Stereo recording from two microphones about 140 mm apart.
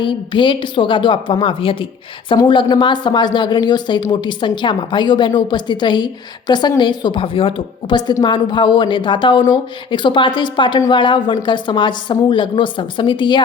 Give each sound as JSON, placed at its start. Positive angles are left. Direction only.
{"t": 0.0, "sound": "a woman's voice", "side_deg": 35}